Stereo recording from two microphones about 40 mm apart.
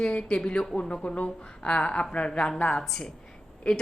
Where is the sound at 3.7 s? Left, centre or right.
Left.